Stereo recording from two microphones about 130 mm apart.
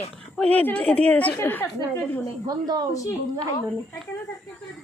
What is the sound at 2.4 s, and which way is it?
Speech, 30° right (ahead or behind).